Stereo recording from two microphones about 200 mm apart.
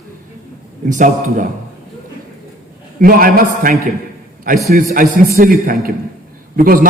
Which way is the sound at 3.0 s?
45° right (ahead or behind).